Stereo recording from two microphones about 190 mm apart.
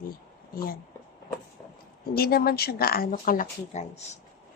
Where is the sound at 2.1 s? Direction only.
55° left (ahead or behind).